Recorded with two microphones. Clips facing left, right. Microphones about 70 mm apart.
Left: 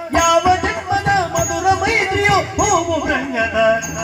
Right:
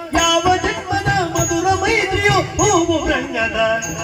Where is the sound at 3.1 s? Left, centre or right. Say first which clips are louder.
Left 1 dB; left.